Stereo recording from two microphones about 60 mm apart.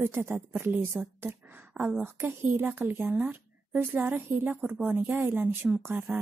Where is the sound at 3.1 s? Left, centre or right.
Right.